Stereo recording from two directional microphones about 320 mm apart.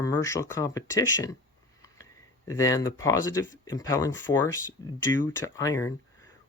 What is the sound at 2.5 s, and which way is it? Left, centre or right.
Speech, centre.